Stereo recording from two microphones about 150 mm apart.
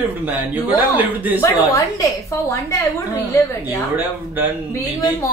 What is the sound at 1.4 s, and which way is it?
Speech, 20° left (ahead or behind).